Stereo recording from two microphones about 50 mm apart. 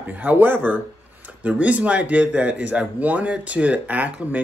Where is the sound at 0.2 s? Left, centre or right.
Right.